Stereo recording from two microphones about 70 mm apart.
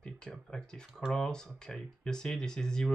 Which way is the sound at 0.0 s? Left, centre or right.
Centre.